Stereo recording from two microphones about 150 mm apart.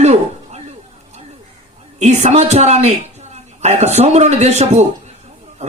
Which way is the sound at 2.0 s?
50° right (ahead or behind).